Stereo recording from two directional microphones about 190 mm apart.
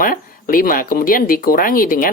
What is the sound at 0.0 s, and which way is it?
Speech, 45° left (ahead or behind).